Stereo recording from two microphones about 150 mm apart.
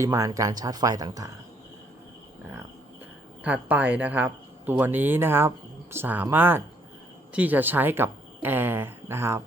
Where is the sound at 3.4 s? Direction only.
10° right (ahead or behind).